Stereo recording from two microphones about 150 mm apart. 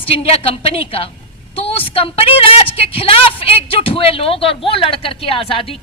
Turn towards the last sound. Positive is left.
turn(degrees=40)  # may be behind; listen again after turning